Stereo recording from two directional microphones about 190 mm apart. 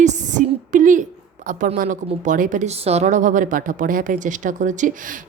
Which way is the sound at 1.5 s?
45° right (ahead or behind).